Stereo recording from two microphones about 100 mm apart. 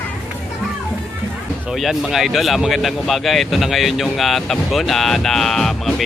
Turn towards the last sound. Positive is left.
turn(degrees=5)  # may be behind; listen again after turning